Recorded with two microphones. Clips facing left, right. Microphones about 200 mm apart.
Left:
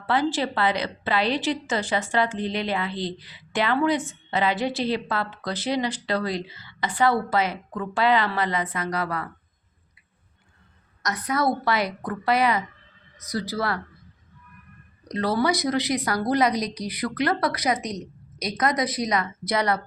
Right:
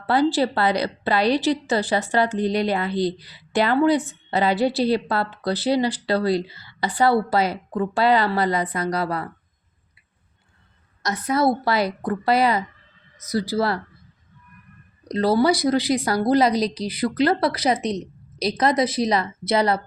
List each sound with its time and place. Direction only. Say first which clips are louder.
0.0 s a woman's voice: right 5 dB; 35° right (ahead or behind)
11.0 s a woman's voice: right 4 dB; 25° right (ahead or behind)
15.0 s a woman's voice: right 5 dB; 30° right (ahead or behind)